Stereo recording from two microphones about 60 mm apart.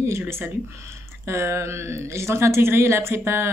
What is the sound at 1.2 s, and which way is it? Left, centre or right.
Speech, right.